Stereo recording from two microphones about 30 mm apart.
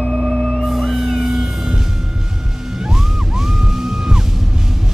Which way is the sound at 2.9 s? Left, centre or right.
Centre.